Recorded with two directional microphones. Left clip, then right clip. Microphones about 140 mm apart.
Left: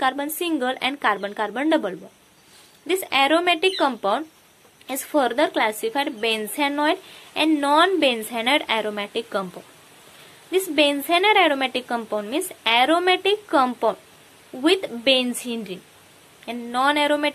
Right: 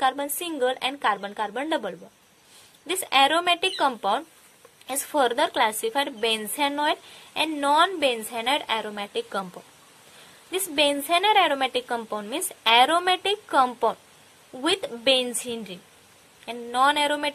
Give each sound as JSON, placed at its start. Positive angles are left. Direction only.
{"t": 0.0, "sound": "a woman's voice", "side_deg": -25}
{"t": 2.9, "sound": "a woman's voice", "side_deg": -35}
{"t": 10.5, "sound": "a woman's voice", "side_deg": -30}